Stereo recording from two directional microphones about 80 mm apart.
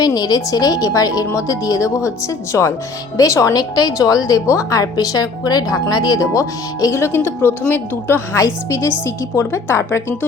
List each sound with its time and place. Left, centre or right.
0.0 s a woman's voice: left